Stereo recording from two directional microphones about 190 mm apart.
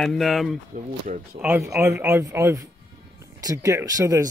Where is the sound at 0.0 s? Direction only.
Centre (ahead or behind).